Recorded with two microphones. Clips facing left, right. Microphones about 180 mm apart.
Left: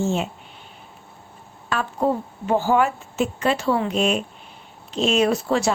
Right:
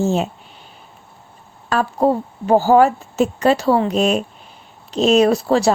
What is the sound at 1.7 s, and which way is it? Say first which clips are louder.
Speech: right 5 dB; 40° right (ahead or behind).